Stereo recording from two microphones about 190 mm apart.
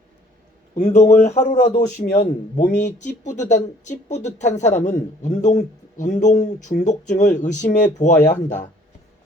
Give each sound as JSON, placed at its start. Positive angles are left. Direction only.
{"t": 0.8, "sound": "a man's voice", "side_deg": 35}